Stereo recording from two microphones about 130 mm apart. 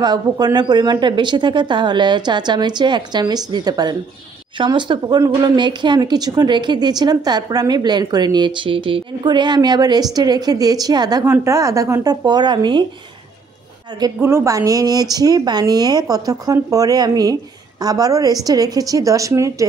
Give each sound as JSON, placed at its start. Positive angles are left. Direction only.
{"t": 0.0, "sound": "a woman's voice", "side_deg": -30}
{"t": 14.2, "sound": "speech", "side_deg": -20}